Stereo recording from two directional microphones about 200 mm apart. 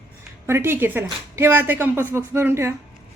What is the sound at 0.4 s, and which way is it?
A woman's voice, 10° right (ahead or behind).